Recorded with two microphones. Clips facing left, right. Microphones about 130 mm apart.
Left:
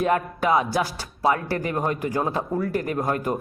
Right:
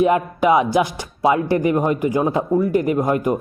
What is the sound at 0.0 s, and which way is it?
Speech, 15° right (ahead or behind).